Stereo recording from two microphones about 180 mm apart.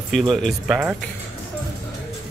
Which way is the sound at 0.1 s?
Centre (ahead or behind).